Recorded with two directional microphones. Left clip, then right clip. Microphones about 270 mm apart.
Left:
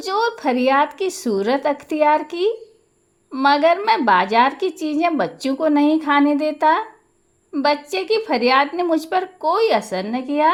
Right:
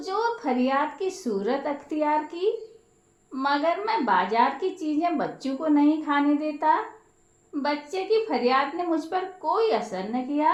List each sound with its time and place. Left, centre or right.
0.0 s a woman's voice: left